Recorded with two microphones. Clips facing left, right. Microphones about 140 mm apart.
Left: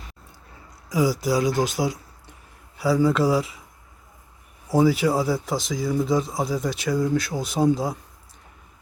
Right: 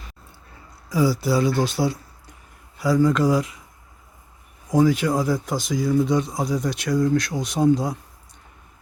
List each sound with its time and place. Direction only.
0.9 s speech: 15° left (ahead or behind)
2.7 s speech: 5° left (ahead or behind)
4.7 s speech: 5° left (ahead or behind)